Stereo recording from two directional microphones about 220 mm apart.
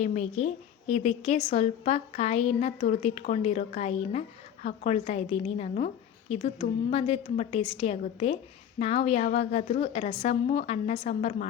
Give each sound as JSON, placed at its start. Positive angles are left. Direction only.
{"t": 0.0, "sound": "a woman's voice", "side_deg": 30}